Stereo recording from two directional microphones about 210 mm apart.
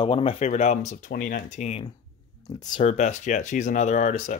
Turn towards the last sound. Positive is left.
turn(degrees=35)  # may be behind; listen again after turning